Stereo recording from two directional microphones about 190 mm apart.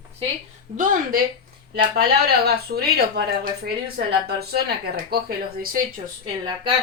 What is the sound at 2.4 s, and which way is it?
A woman's voice, 55° right (ahead or behind).